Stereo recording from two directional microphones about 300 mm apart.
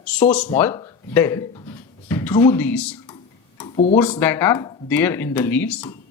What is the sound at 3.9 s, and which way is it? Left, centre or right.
Speech, centre.